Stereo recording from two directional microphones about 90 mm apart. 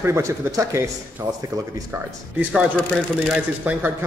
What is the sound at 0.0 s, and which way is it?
Speech, 30° right (ahead or behind).